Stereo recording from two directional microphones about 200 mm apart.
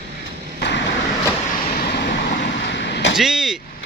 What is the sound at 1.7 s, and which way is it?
Vehicle, 50° left (ahead or behind).